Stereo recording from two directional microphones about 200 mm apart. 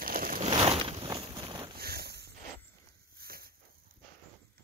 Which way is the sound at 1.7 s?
50° right (ahead or behind).